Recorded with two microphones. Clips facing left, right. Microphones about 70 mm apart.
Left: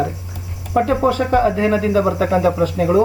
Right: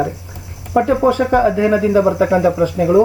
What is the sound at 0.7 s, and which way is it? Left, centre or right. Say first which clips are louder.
Cricket: right 2 dB; centre.